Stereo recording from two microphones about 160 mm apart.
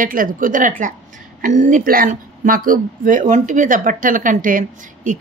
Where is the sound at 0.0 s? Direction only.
60° right (ahead or behind).